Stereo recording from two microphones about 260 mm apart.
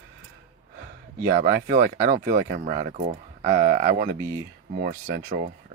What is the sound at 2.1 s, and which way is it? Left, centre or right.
Speech, right.